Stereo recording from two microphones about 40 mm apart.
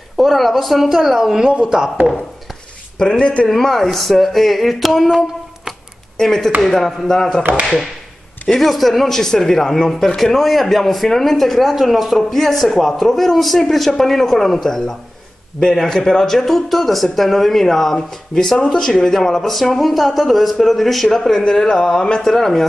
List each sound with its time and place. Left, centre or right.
0.2 s a man's voice: centre; by 1.9 s right
3.0 s speech: left
3.4 s a man's voice: centre
6.1 s speech: centre
8.5 s a man's voice: centre
9.2 s a man's voice: centre